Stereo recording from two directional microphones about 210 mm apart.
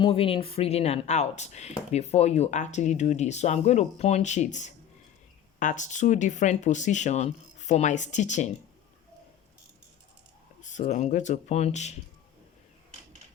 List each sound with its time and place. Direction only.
0.0 s speech: 25° left (ahead or behind)
10.6 s speech: 35° left (ahead or behind)